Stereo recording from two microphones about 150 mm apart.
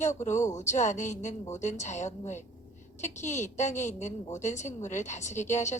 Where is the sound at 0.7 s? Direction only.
55° left (ahead or behind).